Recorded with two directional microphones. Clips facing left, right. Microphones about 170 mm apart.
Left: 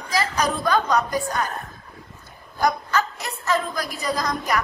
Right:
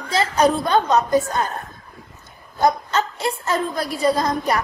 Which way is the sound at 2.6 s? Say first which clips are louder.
Right 3 dB; 25° right (ahead or behind).